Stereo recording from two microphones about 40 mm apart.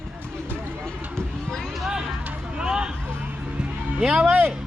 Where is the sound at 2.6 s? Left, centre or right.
Centre.